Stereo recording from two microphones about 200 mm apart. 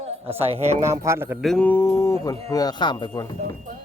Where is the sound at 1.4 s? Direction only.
5° left (ahead or behind).